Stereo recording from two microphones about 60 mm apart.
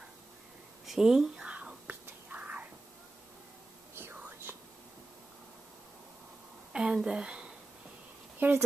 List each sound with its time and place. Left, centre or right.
0.8 s whispering: centre; by 2.7 s right
4.1 s whispering: right
6.7 s a woman's voice: centre
8.4 s speech: right